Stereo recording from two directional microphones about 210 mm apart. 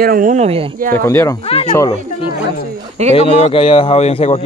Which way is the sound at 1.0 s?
15° left (ahead or behind).